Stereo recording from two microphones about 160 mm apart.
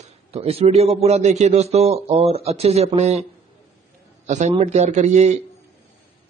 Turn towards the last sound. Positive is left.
turn(degrees=-45)  # may be behind; listen again after turning